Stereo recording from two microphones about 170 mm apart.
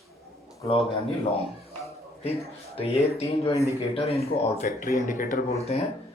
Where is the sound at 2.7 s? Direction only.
35° left (ahead or behind).